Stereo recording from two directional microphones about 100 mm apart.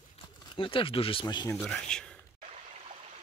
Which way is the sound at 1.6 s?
10° left (ahead or behind).